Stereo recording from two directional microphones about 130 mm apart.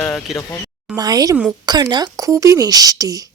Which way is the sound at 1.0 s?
30° right (ahead or behind).